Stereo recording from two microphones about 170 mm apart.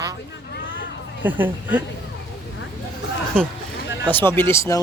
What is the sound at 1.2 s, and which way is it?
Speech, 10° right (ahead or behind).